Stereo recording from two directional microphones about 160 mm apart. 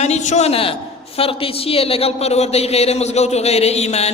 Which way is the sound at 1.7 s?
35° left (ahead or behind).